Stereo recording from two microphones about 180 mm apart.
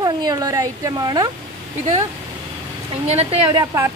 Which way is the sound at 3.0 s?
35° right (ahead or behind).